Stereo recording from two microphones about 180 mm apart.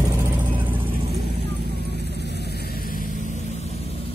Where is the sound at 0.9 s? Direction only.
60° right (ahead or behind).